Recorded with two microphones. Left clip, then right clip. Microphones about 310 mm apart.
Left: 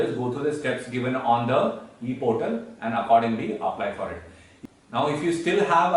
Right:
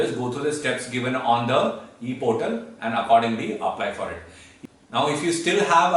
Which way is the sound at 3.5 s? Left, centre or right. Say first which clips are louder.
Right 1 dB; left.